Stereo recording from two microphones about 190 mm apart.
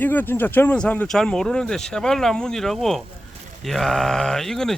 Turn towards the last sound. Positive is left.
turn(degrees=0)  # may be behind; listen again after turning